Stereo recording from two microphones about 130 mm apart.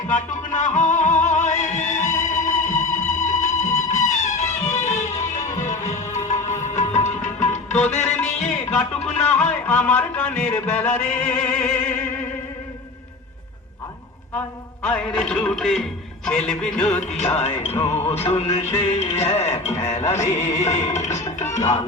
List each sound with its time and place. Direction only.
0.1 s music: 75° left (ahead or behind)
8.4 s music: 5° left (ahead or behind)
9.0 s music: 55° left (ahead or behind)
9.2 s music: 10° left (ahead or behind)
14.3 s a man's voice: 15° left (ahead or behind)
17.0 s music: 60° left (ahead or behind)